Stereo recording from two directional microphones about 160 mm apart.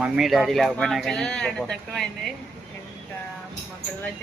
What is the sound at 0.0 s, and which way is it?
Speech, centre (ahead or behind).